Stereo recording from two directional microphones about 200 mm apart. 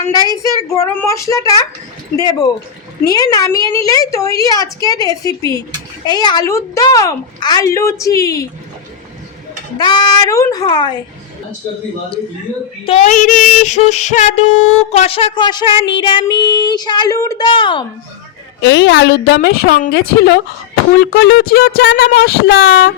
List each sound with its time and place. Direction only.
0.0 s a woman's voice: 20° left (ahead or behind)
3.1 s female singing: 20° left (ahead or behind)
3.7 s a woman's voice: 15° left (ahead or behind)
9.7 s female singing: 20° left (ahead or behind)
12.8 s female singing: 30° left (ahead or behind)
18.6 s a woman's voice: 65° left (ahead or behind)
21.0 s a sound: 55° left (ahead or behind)